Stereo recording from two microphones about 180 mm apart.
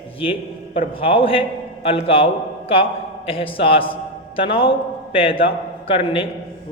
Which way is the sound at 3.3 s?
30° left (ahead or behind).